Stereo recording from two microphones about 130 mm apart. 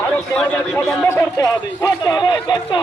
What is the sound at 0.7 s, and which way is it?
A man's voice, 20° left (ahead or behind).